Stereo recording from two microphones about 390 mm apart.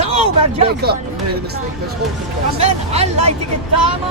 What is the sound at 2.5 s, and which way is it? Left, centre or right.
Speech, centre.